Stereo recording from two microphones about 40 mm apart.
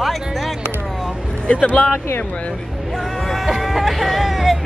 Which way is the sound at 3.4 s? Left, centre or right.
Centre.